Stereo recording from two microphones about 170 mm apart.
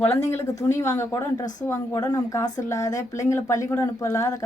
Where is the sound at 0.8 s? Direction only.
15° left (ahead or behind).